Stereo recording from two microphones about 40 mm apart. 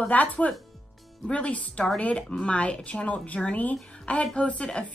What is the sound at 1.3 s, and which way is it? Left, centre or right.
A woman's voice, left.